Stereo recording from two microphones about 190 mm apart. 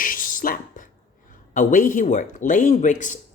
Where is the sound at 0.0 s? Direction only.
45° left (ahead or behind).